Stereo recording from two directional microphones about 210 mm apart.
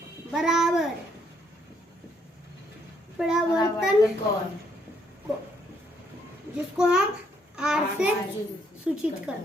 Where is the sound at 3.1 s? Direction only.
Centre (ahead or behind).